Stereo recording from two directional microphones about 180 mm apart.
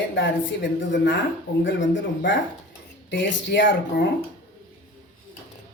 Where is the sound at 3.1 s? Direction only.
75° left (ahead or behind).